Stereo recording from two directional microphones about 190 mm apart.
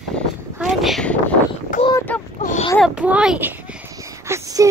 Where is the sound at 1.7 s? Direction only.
45° left (ahead or behind).